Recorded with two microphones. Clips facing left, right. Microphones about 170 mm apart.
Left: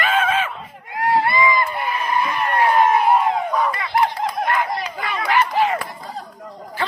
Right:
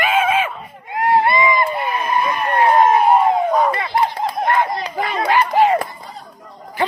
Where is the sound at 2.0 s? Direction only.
20° right (ahead or behind).